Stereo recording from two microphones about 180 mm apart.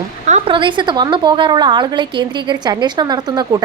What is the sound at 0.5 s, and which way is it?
A woman's voice, 25° right (ahead or behind).